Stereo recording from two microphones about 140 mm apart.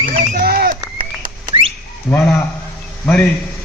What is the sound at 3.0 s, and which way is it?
Speech, 15° left (ahead or behind).